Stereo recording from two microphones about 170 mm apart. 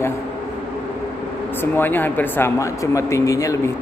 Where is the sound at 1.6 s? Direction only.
10° left (ahead or behind).